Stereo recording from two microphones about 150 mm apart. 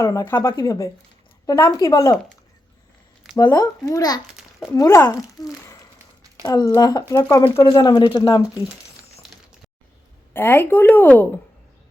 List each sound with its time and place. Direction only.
0.0 s speech: 20° left (ahead or behind)
3.3 s a child's voice: 25° left (ahead or behind)
10.3 s a woman's voice: 15° left (ahead or behind)